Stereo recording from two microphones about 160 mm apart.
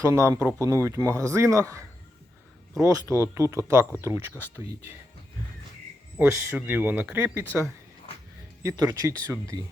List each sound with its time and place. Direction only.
0.0 s a man's voice: 15° right (ahead or behind)
2.8 s a man's voice: 20° right (ahead or behind)
6.1 s a man's voice: 10° right (ahead or behind)